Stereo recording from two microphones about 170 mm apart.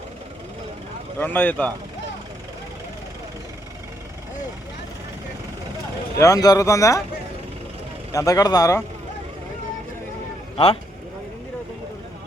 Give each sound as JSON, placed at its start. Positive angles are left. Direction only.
{"t": 1.2, "sound": "speech", "side_deg": 10}
{"t": 6.1, "sound": "speech", "side_deg": 20}
{"t": 8.1, "sound": "speech", "side_deg": 20}